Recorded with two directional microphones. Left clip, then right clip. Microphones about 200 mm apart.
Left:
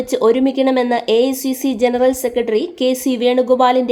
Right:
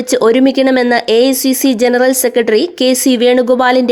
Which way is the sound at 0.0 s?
25° right (ahead or behind).